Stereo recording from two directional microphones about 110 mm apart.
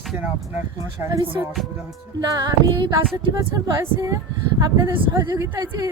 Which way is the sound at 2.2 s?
40° right (ahead or behind).